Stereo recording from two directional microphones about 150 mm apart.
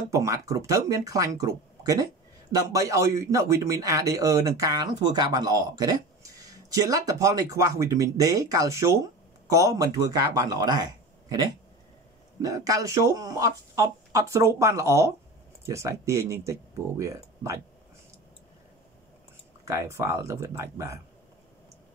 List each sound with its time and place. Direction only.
0.1 s speech: 20° right (ahead or behind)
19.6 s speech: 20° right (ahead or behind)